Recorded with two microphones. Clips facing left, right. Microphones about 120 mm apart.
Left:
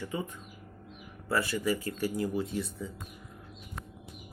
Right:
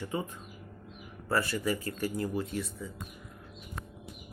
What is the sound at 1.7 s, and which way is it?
Speech, 25° left (ahead or behind).